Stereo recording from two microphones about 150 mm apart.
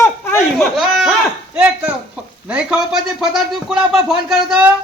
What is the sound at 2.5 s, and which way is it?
A man's voice, 5° right (ahead or behind).